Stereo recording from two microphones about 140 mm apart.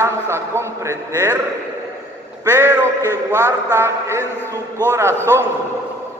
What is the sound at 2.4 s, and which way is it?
A man's voice, 20° right (ahead or behind).